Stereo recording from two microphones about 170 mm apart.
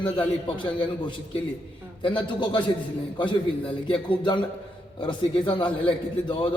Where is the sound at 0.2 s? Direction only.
30° left (ahead or behind).